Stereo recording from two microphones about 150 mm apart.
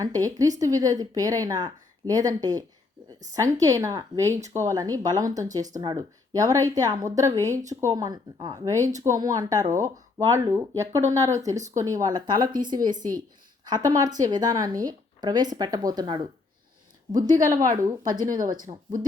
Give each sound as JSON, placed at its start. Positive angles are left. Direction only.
{"t": 0.0, "sound": "speech", "side_deg": -25}
{"t": 18.1, "sound": "speech", "side_deg": -65}
{"t": 18.7, "sound": "speech", "side_deg": -40}